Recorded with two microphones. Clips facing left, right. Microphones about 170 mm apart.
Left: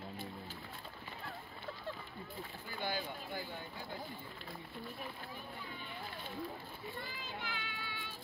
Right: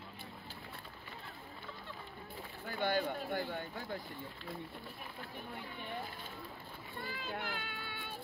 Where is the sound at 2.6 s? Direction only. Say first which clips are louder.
Right 7 dB; 65° right (ahead or behind).